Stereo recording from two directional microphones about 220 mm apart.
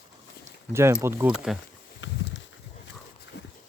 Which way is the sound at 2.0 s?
60° left (ahead or behind).